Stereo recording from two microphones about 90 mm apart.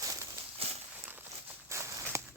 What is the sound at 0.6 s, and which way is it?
Walk, 90° right.